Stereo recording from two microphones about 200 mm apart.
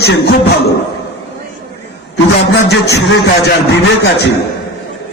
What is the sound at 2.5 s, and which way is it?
Speech, 60° left (ahead or behind).